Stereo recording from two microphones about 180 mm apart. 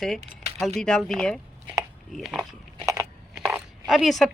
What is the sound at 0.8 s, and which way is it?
Speech, 5° left (ahead or behind).